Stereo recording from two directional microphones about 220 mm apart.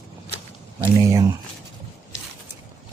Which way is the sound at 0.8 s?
15° right (ahead or behind).